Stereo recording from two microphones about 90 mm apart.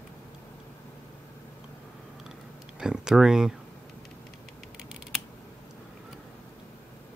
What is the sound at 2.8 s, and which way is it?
Speech, 5° right (ahead or behind).